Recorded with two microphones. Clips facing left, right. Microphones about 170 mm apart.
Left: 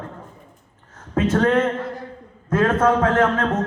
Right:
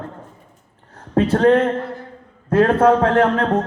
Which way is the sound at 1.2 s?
30° right (ahead or behind).